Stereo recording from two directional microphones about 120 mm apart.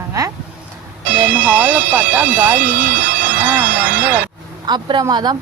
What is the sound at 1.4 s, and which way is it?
Speech, 10° right (ahead or behind).